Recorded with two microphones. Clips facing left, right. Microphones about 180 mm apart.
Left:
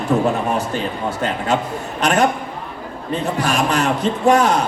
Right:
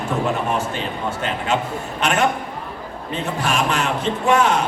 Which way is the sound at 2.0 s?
40° left (ahead or behind).